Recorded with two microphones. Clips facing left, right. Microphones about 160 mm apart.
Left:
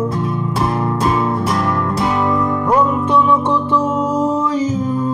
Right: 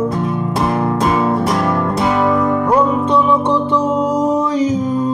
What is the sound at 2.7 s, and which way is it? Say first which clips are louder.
Music: left 1 dB; 20° right (ahead or behind).